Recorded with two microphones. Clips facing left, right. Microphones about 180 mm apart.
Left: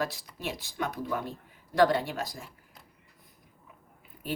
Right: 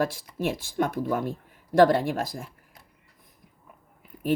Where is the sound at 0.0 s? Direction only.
50° right (ahead or behind).